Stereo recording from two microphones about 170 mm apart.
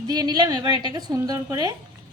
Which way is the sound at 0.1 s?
25° right (ahead or behind).